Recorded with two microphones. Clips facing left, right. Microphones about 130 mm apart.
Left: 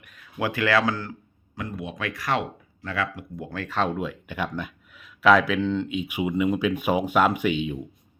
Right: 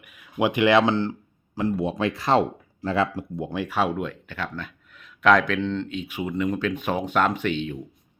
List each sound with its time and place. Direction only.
0.3 s speech: 20° right (ahead or behind); by 7.8 s 10° left (ahead or behind)